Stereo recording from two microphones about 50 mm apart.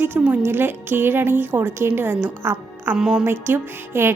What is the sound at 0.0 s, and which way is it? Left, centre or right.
A woman's voice, right.